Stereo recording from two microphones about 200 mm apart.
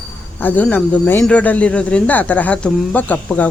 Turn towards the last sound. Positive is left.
turn(degrees=5)  # may be behind; listen again after turning